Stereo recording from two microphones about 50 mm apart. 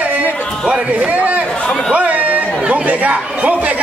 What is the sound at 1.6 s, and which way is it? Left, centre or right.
Speech, left.